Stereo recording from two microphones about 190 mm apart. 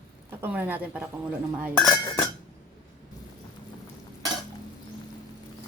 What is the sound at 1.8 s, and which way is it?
Cutlery, 20° left (ahead or behind).